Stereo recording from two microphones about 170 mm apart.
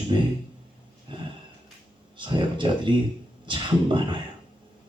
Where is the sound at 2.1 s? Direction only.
30° right (ahead or behind).